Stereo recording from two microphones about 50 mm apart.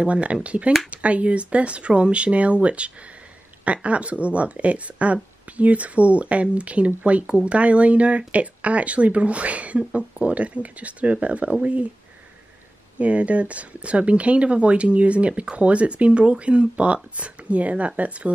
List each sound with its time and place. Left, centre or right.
0.0 s speech: right
13.0 s speech: right